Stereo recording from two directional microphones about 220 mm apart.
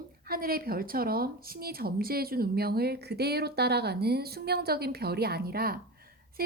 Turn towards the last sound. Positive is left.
turn(degrees=-45)  # may be behind; listen again after turning